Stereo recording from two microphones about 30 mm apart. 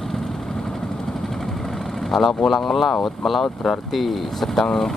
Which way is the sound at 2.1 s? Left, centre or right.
Centre.